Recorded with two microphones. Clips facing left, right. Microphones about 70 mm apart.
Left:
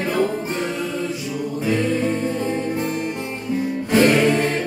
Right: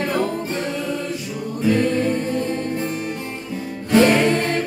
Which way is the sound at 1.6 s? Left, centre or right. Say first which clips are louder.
Right 3 dB; centre.